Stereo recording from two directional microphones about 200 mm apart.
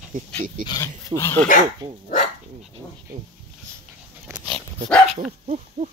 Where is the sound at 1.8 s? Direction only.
25° right (ahead or behind).